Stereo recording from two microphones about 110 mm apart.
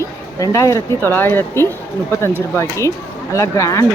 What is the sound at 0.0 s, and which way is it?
Speech, 30° left (ahead or behind).